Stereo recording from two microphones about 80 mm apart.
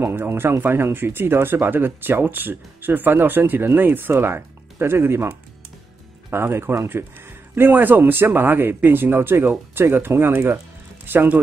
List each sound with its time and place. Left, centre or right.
0.0 s speech: right
6.3 s speech: right